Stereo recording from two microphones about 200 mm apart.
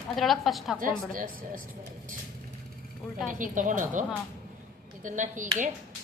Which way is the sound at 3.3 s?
40° right (ahead or behind).